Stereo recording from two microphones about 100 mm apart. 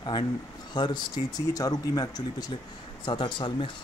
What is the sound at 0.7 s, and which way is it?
Speech, 50° left (ahead or behind).